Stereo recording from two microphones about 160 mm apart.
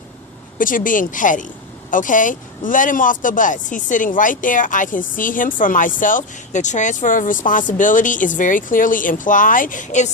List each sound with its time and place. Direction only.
0.6 s speech: 55° left (ahead or behind)